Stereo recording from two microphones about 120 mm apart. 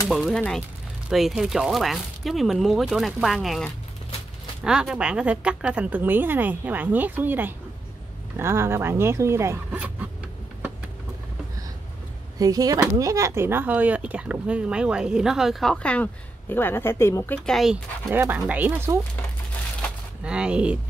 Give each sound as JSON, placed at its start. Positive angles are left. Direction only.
{"t": 0.1, "sound": "speech", "side_deg": 0}
{"t": 0.4, "sound": "speech", "side_deg": 10}
{"t": 1.0, "sound": "speech", "side_deg": -5}
{"t": 4.6, "sound": "speech", "side_deg": -5}
{"t": 12.4, "sound": "speech", "side_deg": -30}
{"t": 17.5, "sound": "speech", "side_deg": 0}
{"t": 18.1, "sound": "speech", "side_deg": -15}
{"t": 20.2, "sound": "speech", "side_deg": -10}